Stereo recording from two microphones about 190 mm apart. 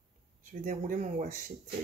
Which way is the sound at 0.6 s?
45° right (ahead or behind).